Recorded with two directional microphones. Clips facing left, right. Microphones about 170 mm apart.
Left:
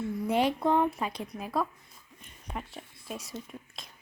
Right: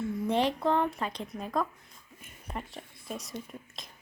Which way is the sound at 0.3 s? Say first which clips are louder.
Left 1 dB; 10° left (ahead or behind).